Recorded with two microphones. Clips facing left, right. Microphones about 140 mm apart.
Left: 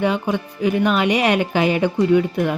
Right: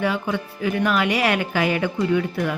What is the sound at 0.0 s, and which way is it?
Speech, 20° left (ahead or behind).